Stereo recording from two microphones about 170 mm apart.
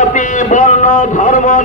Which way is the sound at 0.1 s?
50° left (ahead or behind).